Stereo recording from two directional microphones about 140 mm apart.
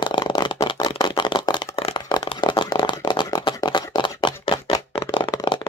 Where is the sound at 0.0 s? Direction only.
30° left (ahead or behind).